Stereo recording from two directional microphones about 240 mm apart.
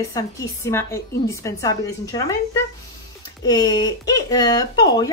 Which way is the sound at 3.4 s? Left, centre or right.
Centre.